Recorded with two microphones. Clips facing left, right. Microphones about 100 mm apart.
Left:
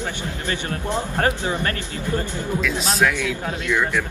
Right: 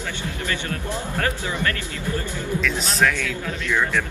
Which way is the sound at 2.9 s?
5° left (ahead or behind).